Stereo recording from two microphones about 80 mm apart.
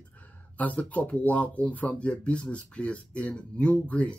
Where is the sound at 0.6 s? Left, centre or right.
Centre.